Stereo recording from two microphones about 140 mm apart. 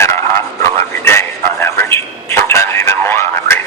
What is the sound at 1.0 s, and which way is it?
Telephone, 15° left (ahead or behind).